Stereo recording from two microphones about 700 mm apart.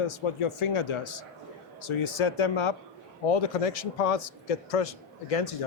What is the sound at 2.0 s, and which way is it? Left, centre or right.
Speech, left.